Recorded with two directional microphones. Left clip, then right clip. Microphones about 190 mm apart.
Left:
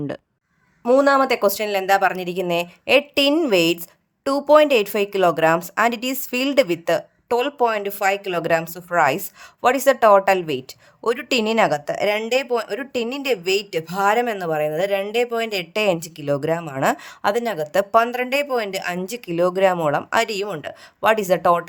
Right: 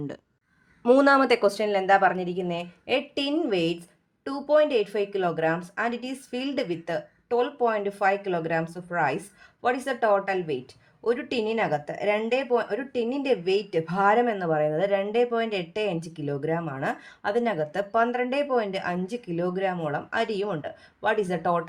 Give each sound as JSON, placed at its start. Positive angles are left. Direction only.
{"t": 0.9, "sound": "speech", "side_deg": 10}
{"t": 1.5, "sound": "a woman's voice", "side_deg": 25}